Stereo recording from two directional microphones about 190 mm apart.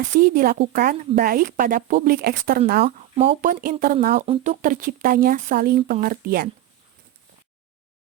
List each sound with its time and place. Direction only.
0.1 s speech: 50° right (ahead or behind)
2.8 s speech: 30° right (ahead or behind)
3.4 s speech: 45° right (ahead or behind)
4.1 s speech: 35° right (ahead or behind); by 6.5 s 50° right (ahead or behind)